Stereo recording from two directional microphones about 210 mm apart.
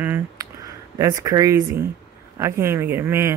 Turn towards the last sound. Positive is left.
turn(degrees=-10)  # may be behind; listen again after turning